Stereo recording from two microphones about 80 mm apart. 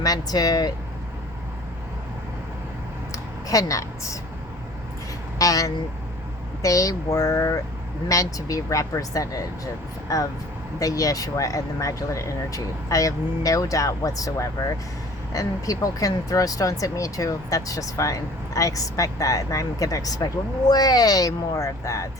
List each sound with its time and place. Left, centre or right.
0.0 s speech: left
3.1 s a sound: left
5.4 s speech: left